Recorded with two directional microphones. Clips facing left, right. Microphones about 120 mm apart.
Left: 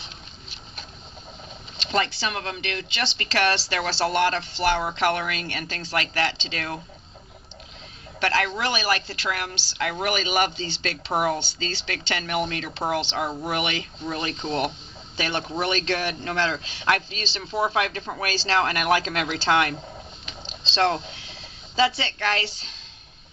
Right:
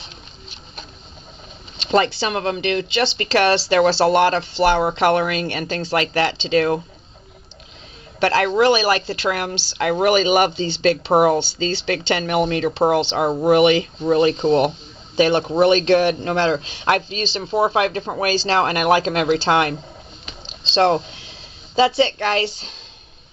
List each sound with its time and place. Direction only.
1.8 s speech: 25° right (ahead or behind)
8.2 s speech: 25° right (ahead or behind)
13.3 s speech: 35° right (ahead or behind)
13.6 s speech: 25° right (ahead or behind)
20.7 s speech: 30° right (ahead or behind)